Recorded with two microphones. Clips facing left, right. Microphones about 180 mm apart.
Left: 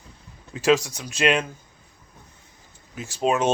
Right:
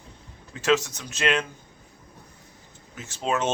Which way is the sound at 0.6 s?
10° left (ahead or behind).